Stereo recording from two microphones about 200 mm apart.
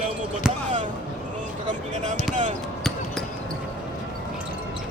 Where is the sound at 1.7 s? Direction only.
35° right (ahead or behind).